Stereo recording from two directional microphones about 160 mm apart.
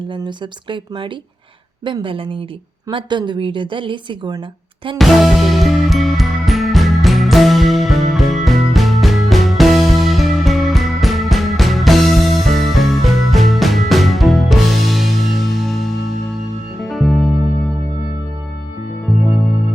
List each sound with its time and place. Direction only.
0.1 s a woman's voice: 30° right (ahead or behind)
4.9 s music: centre (ahead or behind)